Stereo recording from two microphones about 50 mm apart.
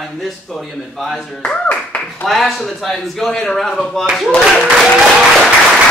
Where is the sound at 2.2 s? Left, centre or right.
Centre.